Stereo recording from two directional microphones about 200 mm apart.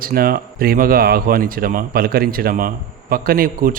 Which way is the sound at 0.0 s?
50° right (ahead or behind).